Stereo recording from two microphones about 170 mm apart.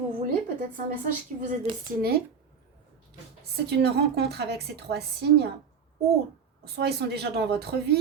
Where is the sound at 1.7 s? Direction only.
30° right (ahead or behind).